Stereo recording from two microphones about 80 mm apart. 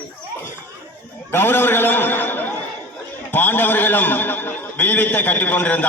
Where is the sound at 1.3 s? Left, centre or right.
Left.